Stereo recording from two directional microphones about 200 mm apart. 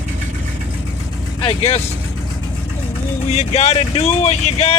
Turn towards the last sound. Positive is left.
turn(degrees=30)  # may be behind; listen again after turning